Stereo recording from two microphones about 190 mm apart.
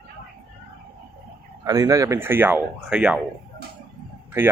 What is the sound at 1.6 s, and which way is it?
Speech, 15° right (ahead or behind).